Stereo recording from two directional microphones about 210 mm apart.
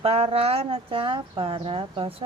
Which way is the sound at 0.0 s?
25° right (ahead or behind).